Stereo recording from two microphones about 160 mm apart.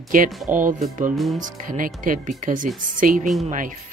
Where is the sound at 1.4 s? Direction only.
55° right (ahead or behind).